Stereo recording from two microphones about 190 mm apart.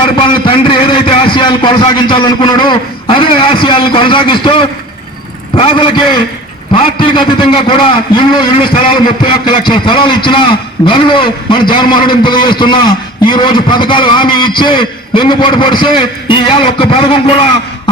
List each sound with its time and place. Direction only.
0.0 s a man's voice: 30° left (ahead or behind)